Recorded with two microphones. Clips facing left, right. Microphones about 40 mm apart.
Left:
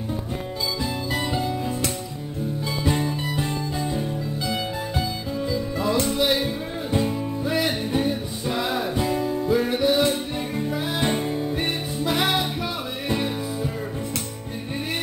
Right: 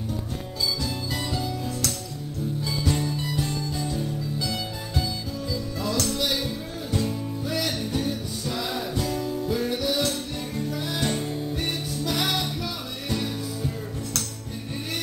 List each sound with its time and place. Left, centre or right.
1.1 s music: left